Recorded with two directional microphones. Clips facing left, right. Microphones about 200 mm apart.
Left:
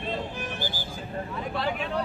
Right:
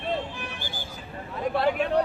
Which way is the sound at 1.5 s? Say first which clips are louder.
Right 7 dB; 55° right (ahead or behind).